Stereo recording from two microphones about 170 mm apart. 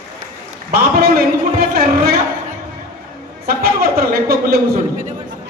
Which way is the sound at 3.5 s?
65° right (ahead or behind).